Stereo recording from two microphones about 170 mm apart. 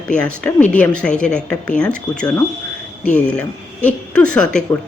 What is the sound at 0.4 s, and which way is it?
A woman's voice, 5° left (ahead or behind).